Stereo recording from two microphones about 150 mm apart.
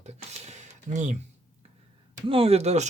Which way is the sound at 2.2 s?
40° right (ahead or behind).